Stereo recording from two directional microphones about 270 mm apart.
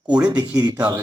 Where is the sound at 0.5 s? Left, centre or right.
Centre.